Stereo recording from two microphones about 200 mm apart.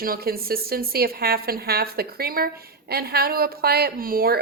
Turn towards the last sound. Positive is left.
turn(degrees=-45)  # may be behind; listen again after turning